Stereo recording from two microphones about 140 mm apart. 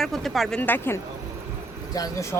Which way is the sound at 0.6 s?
15° left (ahead or behind).